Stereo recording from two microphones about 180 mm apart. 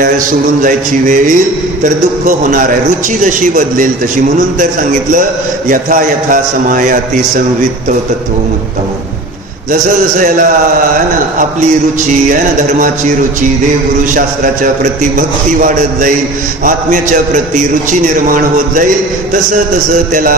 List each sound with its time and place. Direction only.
0.6 s a man's voice: 45° right (ahead or behind)
5.7 s a man's voice: 45° right (ahead or behind)
12.3 s a man's voice: 45° right (ahead or behind)
14.1 s a man's voice: 45° right (ahead or behind)